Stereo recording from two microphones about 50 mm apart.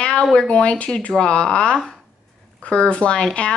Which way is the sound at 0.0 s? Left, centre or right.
Left.